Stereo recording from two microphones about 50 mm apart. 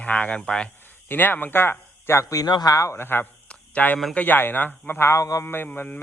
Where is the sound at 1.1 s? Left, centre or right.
Left.